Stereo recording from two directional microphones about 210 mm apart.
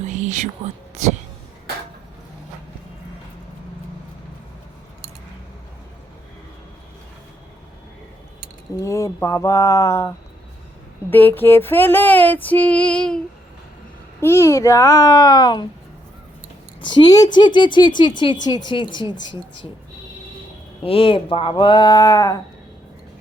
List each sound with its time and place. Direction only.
0.0 s whispering: 35° right (ahead or behind)
8.8 s female singing: 15° left (ahead or behind)
11.1 s female singing: 10° left (ahead or behind)
16.8 s speech: 20° left (ahead or behind)
20.8 s speech: 25° left (ahead or behind)